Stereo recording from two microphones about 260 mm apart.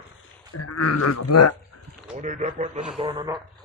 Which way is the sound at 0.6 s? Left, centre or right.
Left.